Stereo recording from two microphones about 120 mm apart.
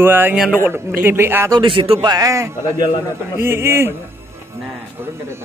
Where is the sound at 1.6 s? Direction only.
50° right (ahead or behind).